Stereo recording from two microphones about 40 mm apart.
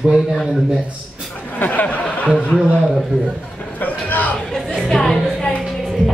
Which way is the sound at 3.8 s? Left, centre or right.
Left.